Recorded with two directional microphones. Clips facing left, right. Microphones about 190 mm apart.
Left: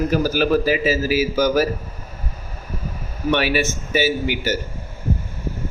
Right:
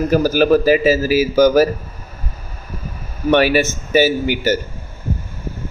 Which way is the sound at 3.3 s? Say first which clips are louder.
Right 6 dB; 45° right (ahead or behind).